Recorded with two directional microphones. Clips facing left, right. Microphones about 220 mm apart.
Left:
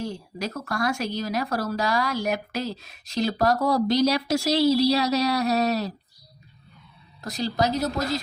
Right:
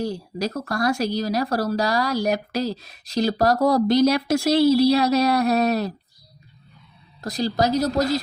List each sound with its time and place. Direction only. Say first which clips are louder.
0.0 s speech: right 5 dB; 35° right (ahead or behind); by 5.9 s 55° right (ahead or behind)
7.2 s speech: right 3 dB; 35° right (ahead or behind)